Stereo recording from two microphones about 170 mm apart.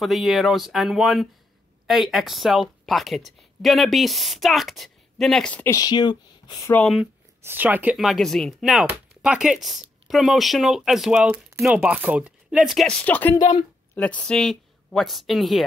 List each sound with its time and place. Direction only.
0.0 s speech: centre (ahead or behind)
5.8 s speech: 25° left (ahead or behind)
6.7 s speech: 5° left (ahead or behind)
7.4 s speech: 10° right (ahead or behind); by 13.4 s 10° left (ahead or behind)
13.4 s speech: 30° left (ahead or behind)
13.9 s speech: 5° left (ahead or behind)